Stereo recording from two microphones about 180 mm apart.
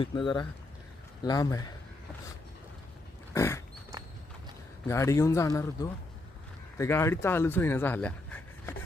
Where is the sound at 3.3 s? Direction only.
15° left (ahead or behind).